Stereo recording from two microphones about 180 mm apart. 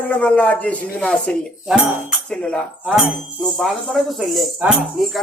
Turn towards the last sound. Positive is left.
turn(degrees=0)  # may be behind; listen again after turning